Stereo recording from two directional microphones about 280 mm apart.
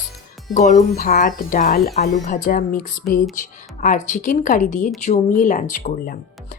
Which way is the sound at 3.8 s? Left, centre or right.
Left.